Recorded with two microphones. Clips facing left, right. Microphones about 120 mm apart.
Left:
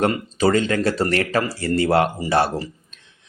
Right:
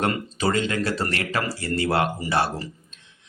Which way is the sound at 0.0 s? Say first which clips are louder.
Left 5 dB; 35° left (ahead or behind).